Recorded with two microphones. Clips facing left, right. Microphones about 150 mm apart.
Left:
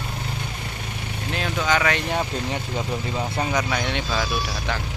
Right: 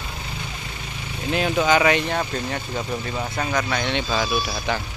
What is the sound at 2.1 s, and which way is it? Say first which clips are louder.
Speech: even; 15° left (ahead or behind).